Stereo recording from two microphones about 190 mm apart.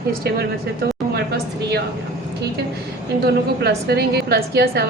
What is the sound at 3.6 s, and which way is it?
A woman's voice, 60° right (ahead or behind).